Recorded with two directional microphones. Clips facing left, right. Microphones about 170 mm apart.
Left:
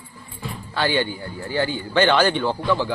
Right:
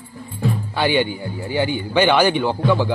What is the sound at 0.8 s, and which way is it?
A man's voice, 15° right (ahead or behind).